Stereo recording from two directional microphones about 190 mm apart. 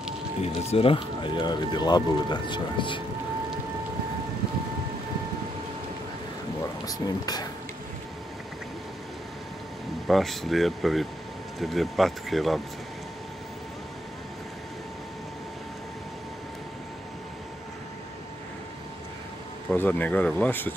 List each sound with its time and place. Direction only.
0.4 s speech: 30° left (ahead or behind)
6.9 s speech: 20° left (ahead or behind)
10.0 s speech: centre (ahead or behind)
19.7 s speech: 10° left (ahead or behind)